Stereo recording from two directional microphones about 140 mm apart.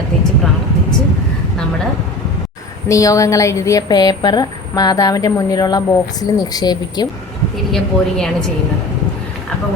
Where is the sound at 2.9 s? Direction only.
25° left (ahead or behind).